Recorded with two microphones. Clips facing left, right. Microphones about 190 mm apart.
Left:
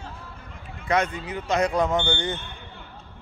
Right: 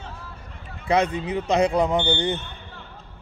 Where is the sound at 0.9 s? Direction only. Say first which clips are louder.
Right 3 dB; 35° right (ahead or behind).